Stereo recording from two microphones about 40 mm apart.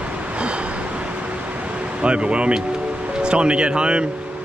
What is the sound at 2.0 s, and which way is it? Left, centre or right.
Speech, right.